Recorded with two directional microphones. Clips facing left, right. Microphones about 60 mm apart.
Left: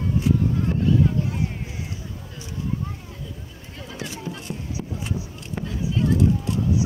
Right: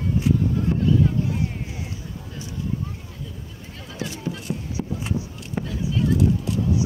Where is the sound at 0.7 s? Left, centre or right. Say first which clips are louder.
Right 1 dB; centre.